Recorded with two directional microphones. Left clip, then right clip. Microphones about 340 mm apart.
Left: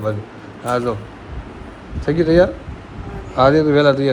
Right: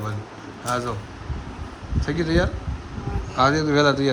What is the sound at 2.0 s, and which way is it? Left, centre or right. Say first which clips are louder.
A man's voice: left 9 dB; centre.